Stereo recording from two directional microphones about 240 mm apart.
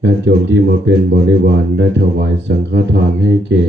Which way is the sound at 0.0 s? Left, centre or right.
Right.